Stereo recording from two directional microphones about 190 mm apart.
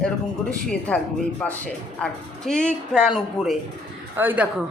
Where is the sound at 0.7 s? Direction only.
5° left (ahead or behind).